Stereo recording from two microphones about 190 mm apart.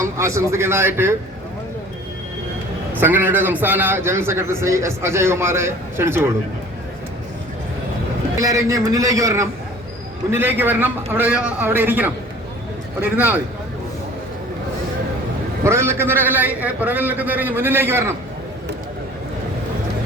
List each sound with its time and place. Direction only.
0.0 s a man's voice: 15° right (ahead or behind)
3.0 s a man's voice: 10° right (ahead or behind)
8.4 s a man's voice: 20° right (ahead or behind)
15.6 s a man's voice: 15° right (ahead or behind)